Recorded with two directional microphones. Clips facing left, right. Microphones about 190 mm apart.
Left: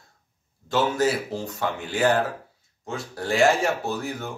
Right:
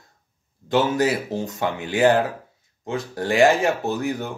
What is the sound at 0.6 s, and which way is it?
Speech, 20° right (ahead or behind).